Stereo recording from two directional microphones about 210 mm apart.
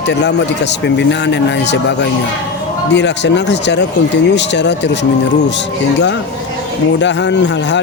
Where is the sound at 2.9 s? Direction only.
55° left (ahead or behind).